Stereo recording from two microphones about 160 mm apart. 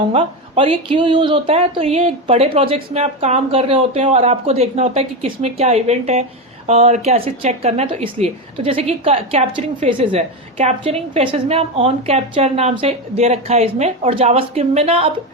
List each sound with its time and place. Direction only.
0.1 s speech: 35° right (ahead or behind)